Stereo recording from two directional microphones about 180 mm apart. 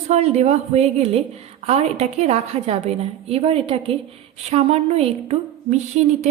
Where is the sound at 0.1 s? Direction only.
40° right (ahead or behind).